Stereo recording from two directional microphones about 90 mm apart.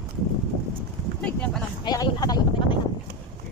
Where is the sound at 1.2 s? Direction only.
15° left (ahead or behind).